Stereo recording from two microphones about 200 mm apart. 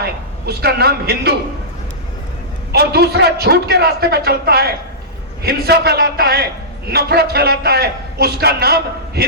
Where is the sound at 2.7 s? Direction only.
50° right (ahead or behind).